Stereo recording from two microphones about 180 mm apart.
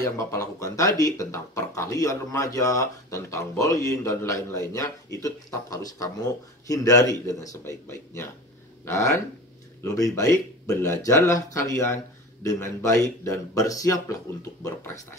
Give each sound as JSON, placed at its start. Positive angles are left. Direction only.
{"t": 0.0, "sound": "speech", "side_deg": 20}
{"t": 9.8, "sound": "speech", "side_deg": 20}